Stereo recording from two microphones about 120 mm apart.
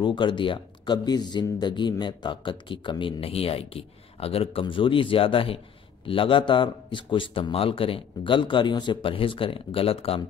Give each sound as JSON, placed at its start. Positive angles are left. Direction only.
{"t": 0.0, "sound": "speech", "side_deg": 40}